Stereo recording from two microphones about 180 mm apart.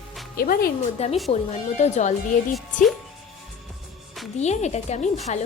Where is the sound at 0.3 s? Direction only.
55° left (ahead or behind).